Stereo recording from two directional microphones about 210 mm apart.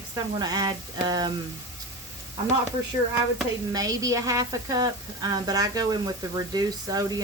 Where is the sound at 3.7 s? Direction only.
15° right (ahead or behind).